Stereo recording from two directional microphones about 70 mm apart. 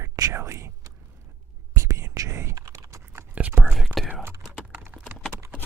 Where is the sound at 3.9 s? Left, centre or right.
Centre.